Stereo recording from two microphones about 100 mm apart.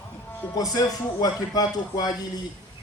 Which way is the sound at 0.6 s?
40° left (ahead or behind).